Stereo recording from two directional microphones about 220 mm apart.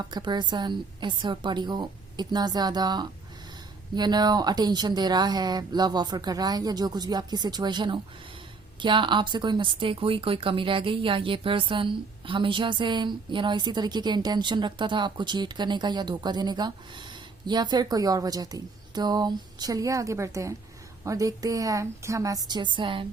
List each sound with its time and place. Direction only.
0.0 s a woman's voice: 20° right (ahead or behind)